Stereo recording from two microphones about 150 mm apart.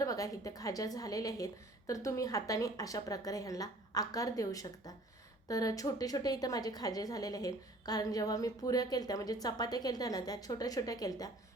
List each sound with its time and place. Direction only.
0.0 s a woman's voice: 20° left (ahead or behind)